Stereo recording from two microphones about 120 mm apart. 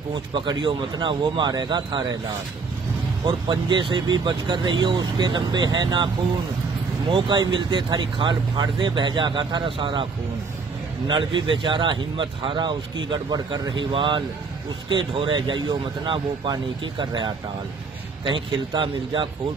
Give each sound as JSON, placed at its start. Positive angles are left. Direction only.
{"t": 0.3, "sound": "speech", "side_deg": -40}
{"t": 3.3, "sound": "speech", "side_deg": -40}
{"t": 7.1, "sound": "speech", "side_deg": -45}
{"t": 11.1, "sound": "speech", "side_deg": -45}